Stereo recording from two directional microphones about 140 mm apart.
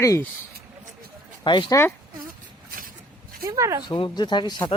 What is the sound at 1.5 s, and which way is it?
Speech, 35° left (ahead or behind).